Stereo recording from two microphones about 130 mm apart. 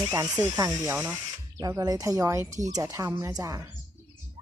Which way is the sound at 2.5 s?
65° right (ahead or behind).